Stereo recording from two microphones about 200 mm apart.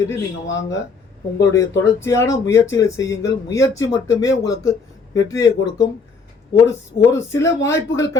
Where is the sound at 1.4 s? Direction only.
15° left (ahead or behind).